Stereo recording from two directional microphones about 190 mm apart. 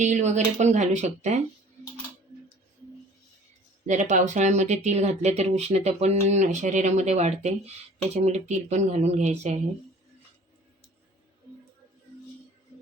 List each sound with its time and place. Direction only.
0.0 s speech: 40° right (ahead or behind)
3.8 s speech: 40° right (ahead or behind)